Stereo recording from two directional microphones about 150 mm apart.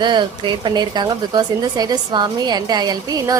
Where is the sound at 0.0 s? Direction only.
30° right (ahead or behind).